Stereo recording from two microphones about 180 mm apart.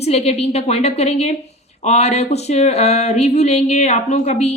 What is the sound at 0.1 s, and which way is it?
A woman's voice, 35° left (ahead or behind).